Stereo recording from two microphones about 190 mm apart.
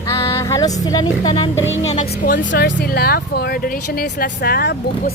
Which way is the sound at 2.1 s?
60° left (ahead or behind).